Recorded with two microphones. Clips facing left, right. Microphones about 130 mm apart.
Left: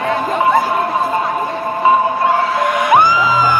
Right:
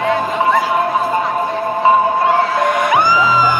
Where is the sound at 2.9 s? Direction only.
50° left (ahead or behind).